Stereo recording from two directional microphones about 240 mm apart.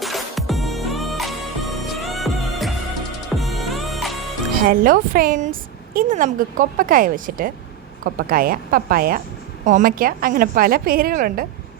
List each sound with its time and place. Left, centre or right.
0.0 s music: centre
4.5 s a woman's voice: right